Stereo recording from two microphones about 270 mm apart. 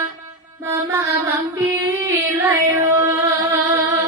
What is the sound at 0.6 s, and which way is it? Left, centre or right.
Music, centre.